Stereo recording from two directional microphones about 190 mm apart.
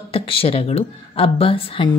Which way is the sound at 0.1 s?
30° left (ahead or behind).